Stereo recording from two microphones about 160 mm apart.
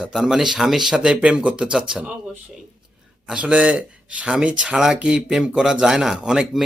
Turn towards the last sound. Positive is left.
turn(degrees=-5)  # may be behind; listen again after turning